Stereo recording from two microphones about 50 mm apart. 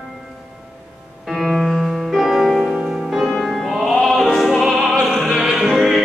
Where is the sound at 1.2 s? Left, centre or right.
Centre.